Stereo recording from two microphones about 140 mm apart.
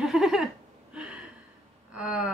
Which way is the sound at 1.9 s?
5° right (ahead or behind).